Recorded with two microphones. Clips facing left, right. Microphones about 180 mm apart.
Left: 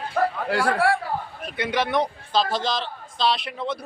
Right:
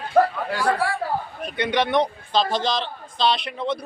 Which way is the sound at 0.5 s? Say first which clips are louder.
Left 1 dB; 65° left (ahead or behind).